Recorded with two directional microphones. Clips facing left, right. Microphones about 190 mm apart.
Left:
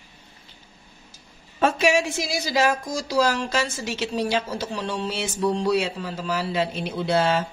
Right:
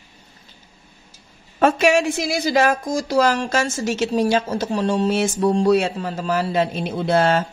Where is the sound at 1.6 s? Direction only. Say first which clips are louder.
Right 4 dB; 55° right (ahead or behind).